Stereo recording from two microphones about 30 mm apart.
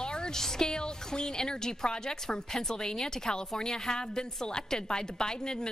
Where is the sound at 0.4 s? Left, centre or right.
Centre.